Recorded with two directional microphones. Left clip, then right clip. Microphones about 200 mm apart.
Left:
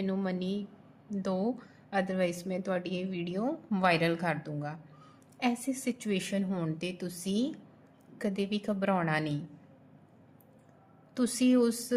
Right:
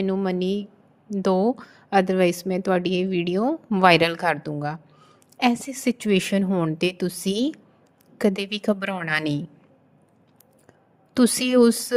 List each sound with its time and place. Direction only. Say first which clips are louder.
0.0 s a woman's voice: right 10 dB; 35° right (ahead or behind)
11.1 s speech: right 9 dB; 45° right (ahead or behind)